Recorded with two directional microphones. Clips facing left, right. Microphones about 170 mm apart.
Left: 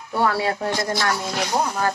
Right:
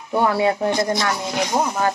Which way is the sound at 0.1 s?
20° right (ahead or behind).